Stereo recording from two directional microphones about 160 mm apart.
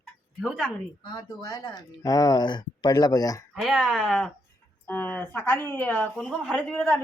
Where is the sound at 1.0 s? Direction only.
25° left (ahead or behind).